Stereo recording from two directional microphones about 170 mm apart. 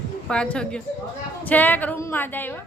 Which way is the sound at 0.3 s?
5° left (ahead or behind).